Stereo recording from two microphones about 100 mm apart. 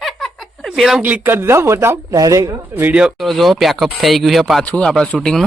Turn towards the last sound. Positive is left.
turn(degrees=5)  # may be behind; listen again after turning